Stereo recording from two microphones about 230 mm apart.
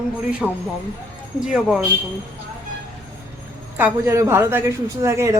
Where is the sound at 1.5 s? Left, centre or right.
Centre.